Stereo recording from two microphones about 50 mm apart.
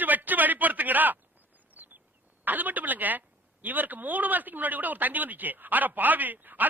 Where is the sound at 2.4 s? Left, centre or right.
Right.